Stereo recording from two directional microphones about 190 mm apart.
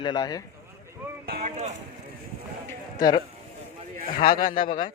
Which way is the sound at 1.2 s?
55° right (ahead or behind).